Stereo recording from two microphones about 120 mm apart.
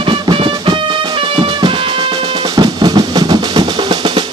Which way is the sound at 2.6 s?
35° right (ahead or behind).